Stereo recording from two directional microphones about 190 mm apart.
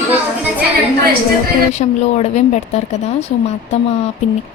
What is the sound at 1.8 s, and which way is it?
Speech, 35° left (ahead or behind).